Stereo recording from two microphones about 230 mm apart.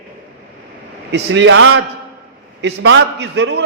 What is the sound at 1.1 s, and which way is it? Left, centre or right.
A man's voice, right.